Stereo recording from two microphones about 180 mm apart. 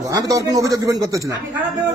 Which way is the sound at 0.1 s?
20° right (ahead or behind).